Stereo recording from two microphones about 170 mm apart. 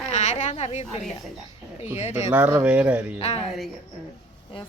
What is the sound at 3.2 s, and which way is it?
Speech, 35° left (ahead or behind).